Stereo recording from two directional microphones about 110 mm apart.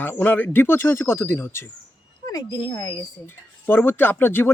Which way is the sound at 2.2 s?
35° left (ahead or behind).